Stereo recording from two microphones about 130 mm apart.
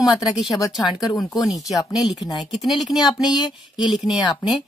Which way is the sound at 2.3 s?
Centre (ahead or behind).